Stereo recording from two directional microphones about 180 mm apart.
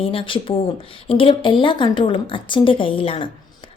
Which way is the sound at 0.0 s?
30° left (ahead or behind).